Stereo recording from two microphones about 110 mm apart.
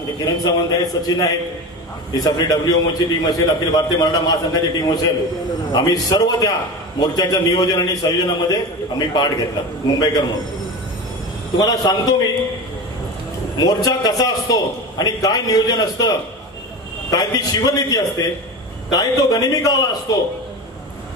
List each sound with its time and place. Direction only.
0.2 s a man's voice: 35° left (ahead or behind)
11.5 s a man's voice: 35° left (ahead or behind)
13.6 s a man's voice: 35° left (ahead or behind)